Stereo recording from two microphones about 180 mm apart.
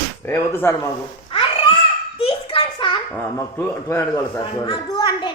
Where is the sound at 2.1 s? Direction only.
30° left (ahead or behind).